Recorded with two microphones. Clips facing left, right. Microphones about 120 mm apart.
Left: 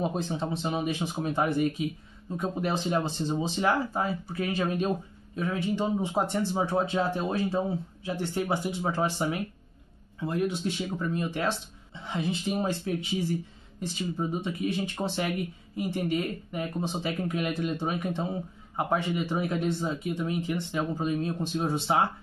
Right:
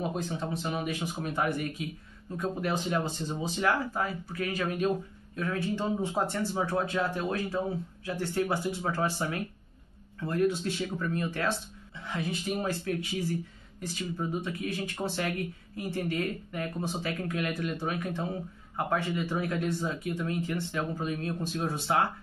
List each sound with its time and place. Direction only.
0.0 s speech: 25° left (ahead or behind)